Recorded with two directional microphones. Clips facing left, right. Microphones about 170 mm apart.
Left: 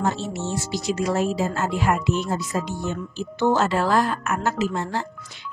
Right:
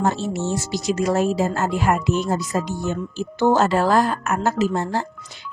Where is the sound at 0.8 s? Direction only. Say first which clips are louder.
Right 3 dB; 45° right (ahead or behind).